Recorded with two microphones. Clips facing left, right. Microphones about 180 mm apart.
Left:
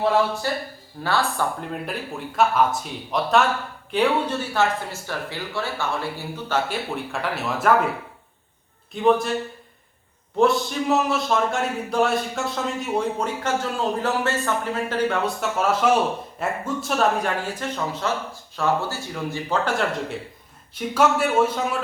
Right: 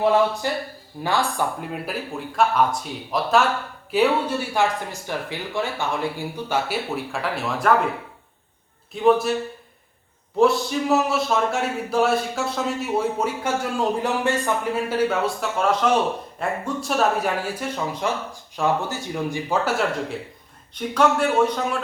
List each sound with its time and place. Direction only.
0.4 s speech: 15° right (ahead or behind); by 7.7 s centre (ahead or behind)
8.9 s speech: centre (ahead or behind)
10.3 s speech: centre (ahead or behind)
20.7 s speech: 5° left (ahead or behind)